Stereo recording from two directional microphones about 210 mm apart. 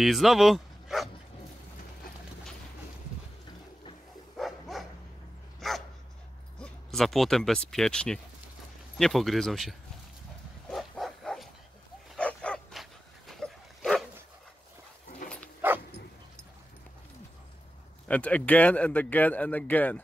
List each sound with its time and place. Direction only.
0.0 s speech: centre (ahead or behind)
4.4 s dog: centre (ahead or behind)
6.6 s speech: centre (ahead or behind)
10.7 s dog: centre (ahead or behind)
15.2 s dog: 40° left (ahead or behind)
15.6 s dog: 10° right (ahead or behind)
18.0 s speech: 5° left (ahead or behind)